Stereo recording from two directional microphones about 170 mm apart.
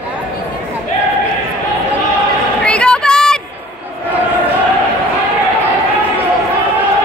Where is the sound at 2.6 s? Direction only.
5° left (ahead or behind).